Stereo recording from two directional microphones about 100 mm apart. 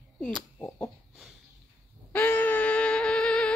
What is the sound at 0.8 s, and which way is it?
Chicken, centre (ahead or behind).